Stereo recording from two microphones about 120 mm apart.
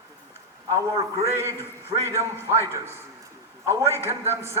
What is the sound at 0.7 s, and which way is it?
A man's voice, 25° right (ahead or behind).